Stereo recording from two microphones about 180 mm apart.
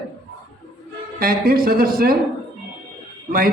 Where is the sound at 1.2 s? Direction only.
55° right (ahead or behind).